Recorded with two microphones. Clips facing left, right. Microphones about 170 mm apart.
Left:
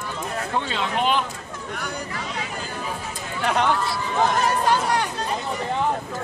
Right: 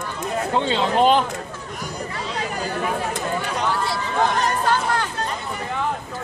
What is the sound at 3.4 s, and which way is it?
Chatter, 65° left (ahead or behind).